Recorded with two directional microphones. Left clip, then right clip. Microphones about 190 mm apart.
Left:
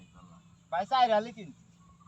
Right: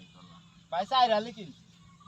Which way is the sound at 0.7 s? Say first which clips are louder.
Even; 15° right (ahead or behind).